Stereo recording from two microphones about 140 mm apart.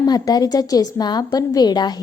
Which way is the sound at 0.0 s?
30° left (ahead or behind).